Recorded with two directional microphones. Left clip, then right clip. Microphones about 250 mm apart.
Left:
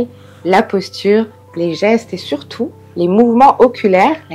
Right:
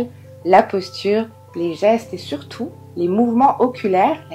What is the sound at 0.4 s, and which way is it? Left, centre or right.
Speech, left.